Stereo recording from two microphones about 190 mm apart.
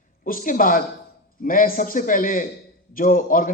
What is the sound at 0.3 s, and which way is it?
A man's voice, 45° left (ahead or behind).